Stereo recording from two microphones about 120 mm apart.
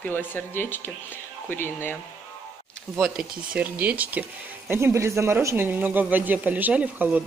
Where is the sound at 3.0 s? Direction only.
5° right (ahead or behind).